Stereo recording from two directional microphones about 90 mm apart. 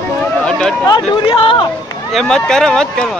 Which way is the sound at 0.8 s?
60° left (ahead or behind).